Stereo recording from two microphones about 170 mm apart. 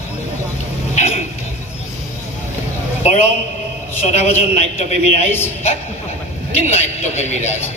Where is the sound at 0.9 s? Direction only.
40° left (ahead or behind).